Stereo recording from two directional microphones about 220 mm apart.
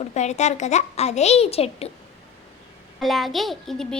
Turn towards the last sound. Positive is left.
turn(degrees=0)  # may be behind; listen again after turning